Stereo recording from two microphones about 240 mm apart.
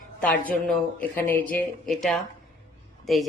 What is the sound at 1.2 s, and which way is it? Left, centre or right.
A woman's voice, centre.